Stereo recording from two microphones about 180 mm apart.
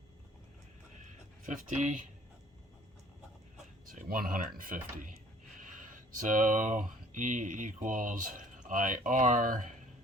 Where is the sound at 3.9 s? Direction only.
50° right (ahead or behind).